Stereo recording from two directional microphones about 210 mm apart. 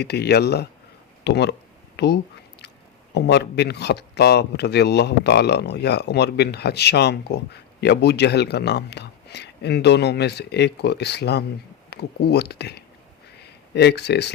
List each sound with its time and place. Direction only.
0.0 s speech: 50° left (ahead or behind)
3.2 s speech: 55° left (ahead or behind)